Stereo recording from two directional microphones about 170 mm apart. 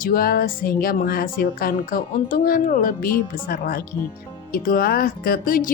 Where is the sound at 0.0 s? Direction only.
60° left (ahead or behind).